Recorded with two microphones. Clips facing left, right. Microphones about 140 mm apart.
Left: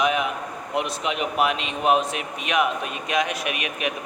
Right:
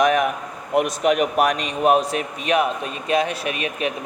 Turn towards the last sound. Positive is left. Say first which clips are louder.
# right 3 dB
turn(degrees=-35)  # may be behind; listen again after turning